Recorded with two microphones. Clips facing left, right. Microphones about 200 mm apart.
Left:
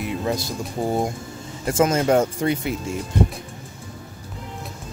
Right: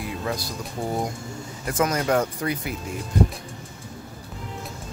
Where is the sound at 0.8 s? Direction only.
25° left (ahead or behind).